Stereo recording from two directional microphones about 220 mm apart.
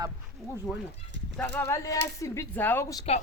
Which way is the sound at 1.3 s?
5° left (ahead or behind).